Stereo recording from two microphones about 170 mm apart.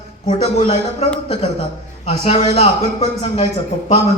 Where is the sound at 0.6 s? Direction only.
40° left (ahead or behind).